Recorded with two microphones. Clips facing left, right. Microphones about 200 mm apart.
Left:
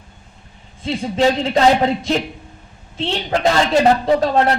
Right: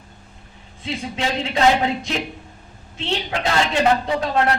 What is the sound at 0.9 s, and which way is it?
Speech, 40° left (ahead or behind).